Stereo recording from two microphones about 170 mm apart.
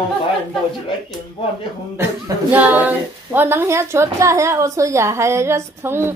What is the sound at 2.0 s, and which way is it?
A woman's voice, 10° right (ahead or behind).